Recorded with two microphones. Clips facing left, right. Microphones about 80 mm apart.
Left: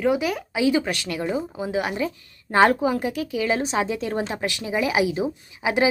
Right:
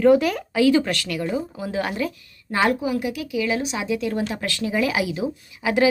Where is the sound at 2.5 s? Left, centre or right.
Left.